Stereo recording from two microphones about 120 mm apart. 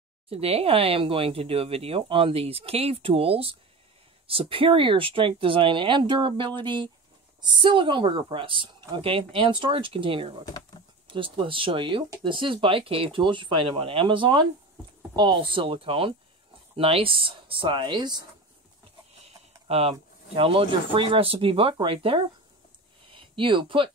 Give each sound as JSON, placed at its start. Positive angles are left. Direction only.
{"t": 0.3, "sound": "speech", "side_deg": -55}
{"t": 19.2, "sound": "speech", "side_deg": -55}